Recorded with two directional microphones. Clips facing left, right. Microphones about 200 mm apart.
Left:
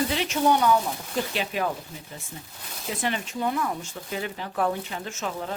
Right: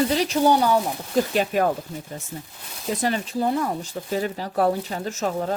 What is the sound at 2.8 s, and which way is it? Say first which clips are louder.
Speech: right 5 dB; 40° right (ahead or behind).